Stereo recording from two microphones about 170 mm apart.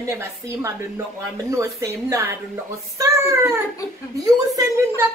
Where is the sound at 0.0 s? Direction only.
15° right (ahead or behind).